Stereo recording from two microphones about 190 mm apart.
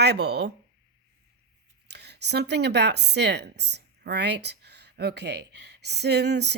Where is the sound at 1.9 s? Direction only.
60° right (ahead or behind).